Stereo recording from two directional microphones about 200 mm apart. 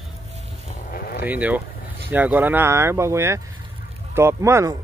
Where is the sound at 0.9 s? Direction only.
50° left (ahead or behind).